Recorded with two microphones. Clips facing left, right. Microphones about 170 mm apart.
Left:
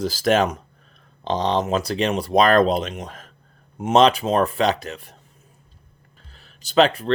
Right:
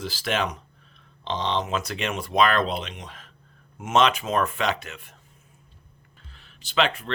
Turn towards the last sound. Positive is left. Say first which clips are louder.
# left 8 dB
turn(degrees=35)  # may be behind; listen again after turning